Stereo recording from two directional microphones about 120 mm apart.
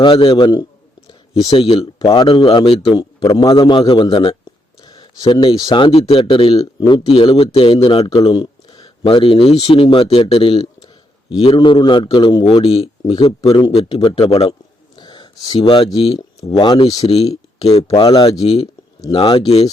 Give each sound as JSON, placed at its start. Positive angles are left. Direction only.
{"t": 0.0, "sound": "speech", "side_deg": 45}
{"t": 1.8, "sound": "speech", "side_deg": 30}
{"t": 12.5, "sound": "speech", "side_deg": 55}
{"t": 14.9, "sound": "speech", "side_deg": 40}
{"t": 17.1, "sound": "speech", "side_deg": 55}
{"t": 18.0, "sound": "speech", "side_deg": 35}
{"t": 18.3, "sound": "speech", "side_deg": 55}